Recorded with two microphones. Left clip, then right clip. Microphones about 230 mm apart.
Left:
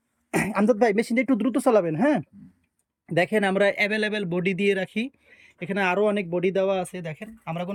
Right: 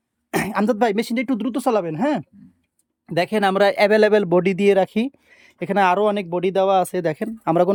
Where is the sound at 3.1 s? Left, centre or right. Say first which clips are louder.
Right 3 dB; centre.